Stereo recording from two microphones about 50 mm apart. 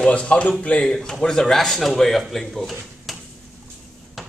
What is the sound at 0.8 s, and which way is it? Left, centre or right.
Speech, centre.